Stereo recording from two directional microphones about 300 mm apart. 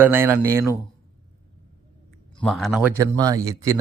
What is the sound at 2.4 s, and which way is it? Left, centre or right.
A man's voice, centre.